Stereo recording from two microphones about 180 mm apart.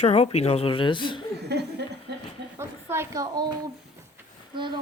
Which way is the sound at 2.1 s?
65° right (ahead or behind).